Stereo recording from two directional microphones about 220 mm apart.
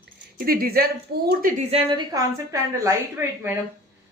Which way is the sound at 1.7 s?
25° right (ahead or behind).